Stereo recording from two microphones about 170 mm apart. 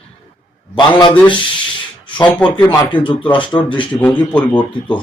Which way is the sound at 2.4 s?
30° left (ahead or behind).